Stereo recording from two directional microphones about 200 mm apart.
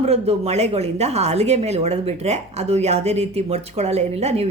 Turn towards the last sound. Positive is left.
turn(degrees=-30)  # may be behind; listen again after turning